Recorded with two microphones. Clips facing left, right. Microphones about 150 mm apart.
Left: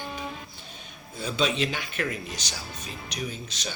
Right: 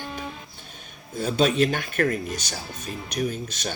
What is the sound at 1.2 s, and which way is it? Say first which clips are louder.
Speech: right 6 dB; 45° right (ahead or behind).